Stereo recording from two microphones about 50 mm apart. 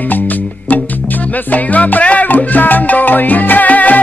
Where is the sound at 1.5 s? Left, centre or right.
Left.